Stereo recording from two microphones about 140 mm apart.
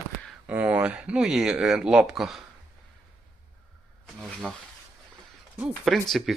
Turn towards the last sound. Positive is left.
turn(degrees=0)  # may be behind; listen again after turning